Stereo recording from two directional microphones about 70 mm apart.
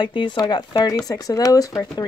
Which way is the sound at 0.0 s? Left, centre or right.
Left.